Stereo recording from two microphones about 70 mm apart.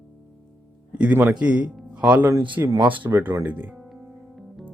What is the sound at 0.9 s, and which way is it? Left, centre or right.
Speech, right.